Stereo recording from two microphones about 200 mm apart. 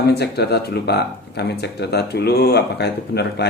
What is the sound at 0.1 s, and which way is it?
Speech, 55° left (ahead or behind).